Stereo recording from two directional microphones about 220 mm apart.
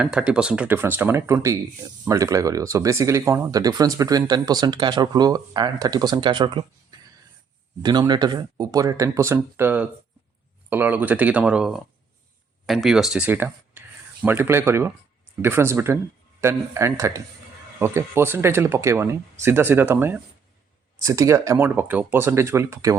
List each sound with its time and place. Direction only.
0.0 s speech: 5° right (ahead or behind); by 6.7 s 20° right (ahead or behind)
7.8 s speech: 20° right (ahead or behind)